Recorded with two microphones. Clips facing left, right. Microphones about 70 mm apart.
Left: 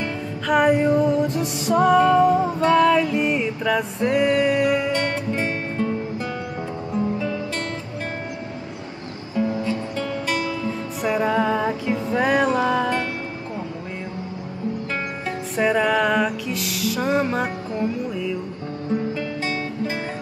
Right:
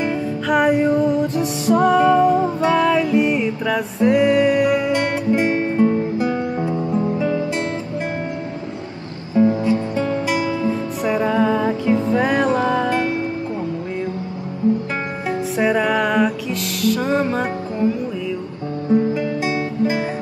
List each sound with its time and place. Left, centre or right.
0.5 s music: centre; by 7.6 s right
9.3 s music: right
10.2 s music: centre
11.1 s music: centre
15.5 s music: centre
18.9 s music: centre